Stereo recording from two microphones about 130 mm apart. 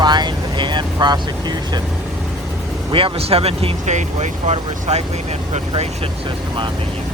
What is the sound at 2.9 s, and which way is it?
Speech, 45° right (ahead or behind).